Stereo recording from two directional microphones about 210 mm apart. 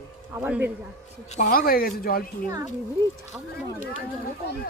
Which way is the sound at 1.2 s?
35° left (ahead or behind).